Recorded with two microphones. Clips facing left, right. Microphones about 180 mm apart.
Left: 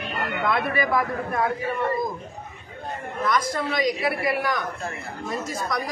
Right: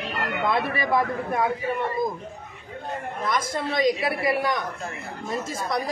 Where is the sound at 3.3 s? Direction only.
25° right (ahead or behind).